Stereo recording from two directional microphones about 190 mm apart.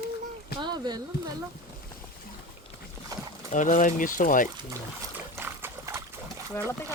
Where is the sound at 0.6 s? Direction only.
20° right (ahead or behind).